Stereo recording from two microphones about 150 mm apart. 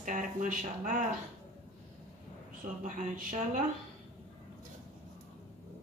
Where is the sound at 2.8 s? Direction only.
55° right (ahead or behind).